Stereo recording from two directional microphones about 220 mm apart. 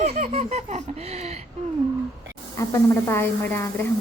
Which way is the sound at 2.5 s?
10° left (ahead or behind).